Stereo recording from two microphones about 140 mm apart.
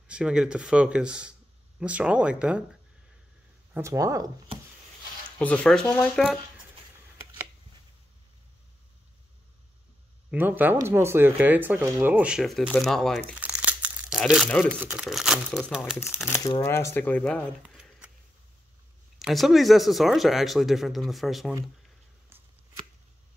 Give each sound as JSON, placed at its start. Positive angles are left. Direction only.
{"t": 0.1, "sound": "speech", "side_deg": -5}
{"t": 3.7, "sound": "speech", "side_deg": -20}
{"t": 5.4, "sound": "speech", "side_deg": 10}
{"t": 10.3, "sound": "speech", "side_deg": -15}
{"t": 13.3, "sound": "crumpling", "side_deg": -10}
{"t": 14.7, "sound": "speech", "side_deg": -10}
{"t": 16.3, "sound": "speech", "side_deg": 25}
{"t": 19.1, "sound": "speech", "side_deg": 0}